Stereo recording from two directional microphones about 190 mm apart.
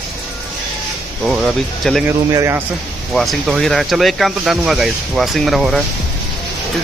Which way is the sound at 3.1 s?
Centre (ahead or behind).